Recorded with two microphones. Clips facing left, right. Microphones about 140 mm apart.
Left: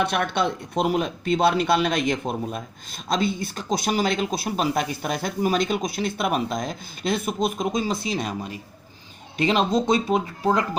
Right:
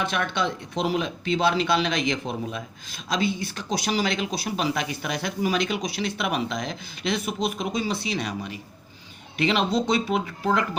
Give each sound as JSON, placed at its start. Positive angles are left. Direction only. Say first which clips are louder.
{"t": 0.0, "sound": "speech", "louder": "left 3 dB", "side_deg": 55}
{"t": 9.4, "sound": "speech", "louder": "left 2 dB", "side_deg": 45}